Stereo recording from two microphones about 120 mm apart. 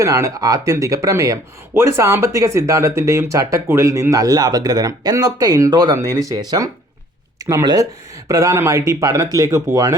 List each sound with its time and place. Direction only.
0.0 s speech: 25° right (ahead or behind)
7.3 s speech: 30° right (ahead or behind)